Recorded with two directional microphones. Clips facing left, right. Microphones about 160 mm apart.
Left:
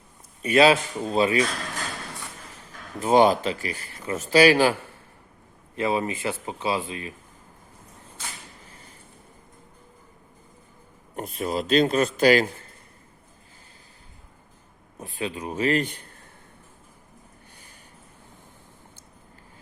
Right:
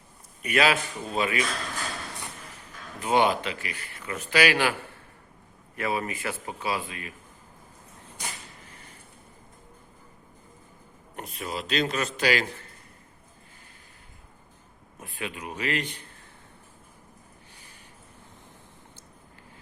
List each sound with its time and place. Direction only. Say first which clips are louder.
0.4 s speech: left 6 dB; 30° left (ahead or behind)
3.0 s speech: left 5 dB; 35° left (ahead or behind)
5.7 s speech: left 4 dB; 25° left (ahead or behind)
11.2 s speech: left 7 dB; 40° left (ahead or behind)
14.9 s speech: left 5 dB; 35° left (ahead or behind)